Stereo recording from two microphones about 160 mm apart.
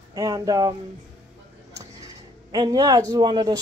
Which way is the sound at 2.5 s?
25° right (ahead or behind).